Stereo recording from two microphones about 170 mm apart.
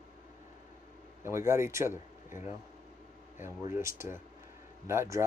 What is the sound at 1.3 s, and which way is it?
Speech, 15° right (ahead or behind).